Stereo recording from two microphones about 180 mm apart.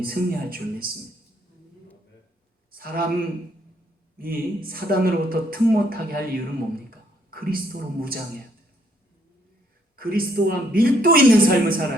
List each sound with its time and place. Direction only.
0.0 s speech: 55° right (ahead or behind)
2.7 s a sound: 55° right (ahead or behind)
4.2 s speech: 55° right (ahead or behind)
9.9 s speech: 55° right (ahead or behind)